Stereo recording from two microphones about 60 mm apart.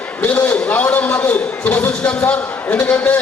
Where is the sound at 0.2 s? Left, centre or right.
Left.